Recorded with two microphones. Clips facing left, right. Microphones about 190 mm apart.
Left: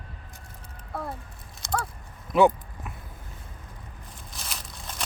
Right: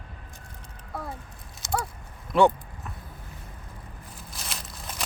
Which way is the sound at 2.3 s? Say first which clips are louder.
Left 1 dB; 5° left (ahead or behind).